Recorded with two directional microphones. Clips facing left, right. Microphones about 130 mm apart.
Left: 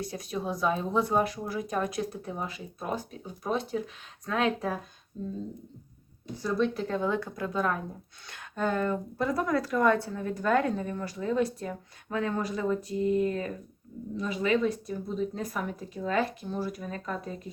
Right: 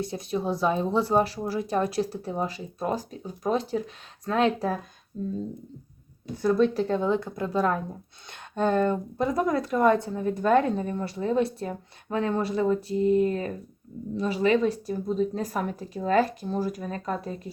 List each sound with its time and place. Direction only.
0.0 s speech: 25° right (ahead or behind)
5.2 s speech: 45° right (ahead or behind)
6.3 s speech: 55° right (ahead or behind)
6.7 s a woman's voice: 30° right (ahead or behind)